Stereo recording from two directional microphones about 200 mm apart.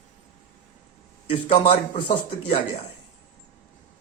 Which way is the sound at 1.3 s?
30° left (ahead or behind).